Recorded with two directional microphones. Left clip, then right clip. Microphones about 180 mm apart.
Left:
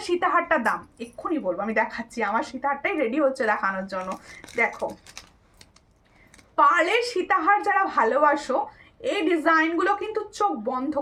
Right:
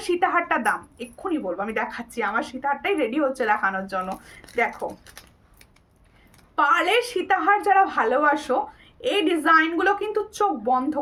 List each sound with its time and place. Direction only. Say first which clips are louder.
0.0 s a woman's voice: right 1 dB; 20° right (ahead or behind)
6.6 s a woman's voice: even; 20° right (ahead or behind)